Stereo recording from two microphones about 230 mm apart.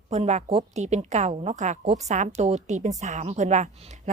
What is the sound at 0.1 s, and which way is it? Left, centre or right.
A woman's voice, right.